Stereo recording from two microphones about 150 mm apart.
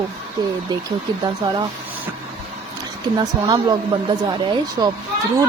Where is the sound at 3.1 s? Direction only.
30° right (ahead or behind).